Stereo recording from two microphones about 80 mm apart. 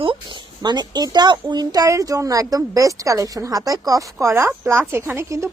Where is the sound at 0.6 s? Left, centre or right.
Right.